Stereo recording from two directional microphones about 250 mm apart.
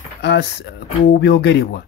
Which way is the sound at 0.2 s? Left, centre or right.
Left.